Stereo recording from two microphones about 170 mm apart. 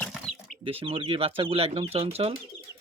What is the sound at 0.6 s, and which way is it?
Speech, 35° right (ahead or behind).